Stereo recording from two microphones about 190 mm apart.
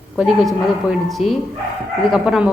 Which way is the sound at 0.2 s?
Centre (ahead or behind).